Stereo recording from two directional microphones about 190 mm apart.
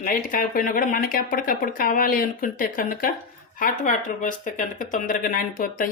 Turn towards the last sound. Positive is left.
turn(degrees=45)  # may be behind; listen again after turning